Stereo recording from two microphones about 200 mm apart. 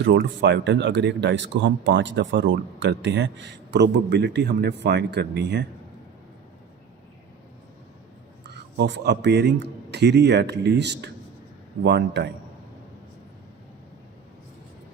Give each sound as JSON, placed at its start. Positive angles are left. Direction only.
{"t": 0.0, "sound": "speech", "side_deg": -60}
{"t": 8.4, "sound": "speech", "side_deg": -60}